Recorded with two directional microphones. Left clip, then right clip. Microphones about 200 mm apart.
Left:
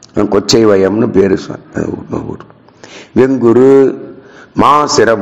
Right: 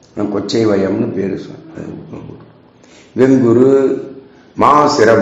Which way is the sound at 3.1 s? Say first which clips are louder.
Left 2 dB; 40° left (ahead or behind).